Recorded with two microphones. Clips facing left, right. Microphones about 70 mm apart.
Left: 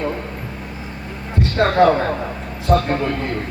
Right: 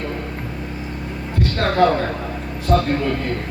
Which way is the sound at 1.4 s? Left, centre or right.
Centre.